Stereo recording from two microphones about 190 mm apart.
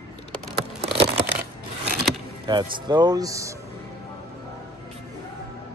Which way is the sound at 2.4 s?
20° right (ahead or behind).